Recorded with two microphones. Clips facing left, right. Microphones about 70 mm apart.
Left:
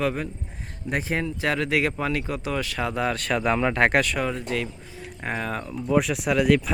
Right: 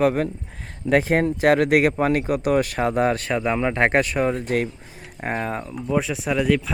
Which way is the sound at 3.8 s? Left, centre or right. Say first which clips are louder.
Right 2 dB; right.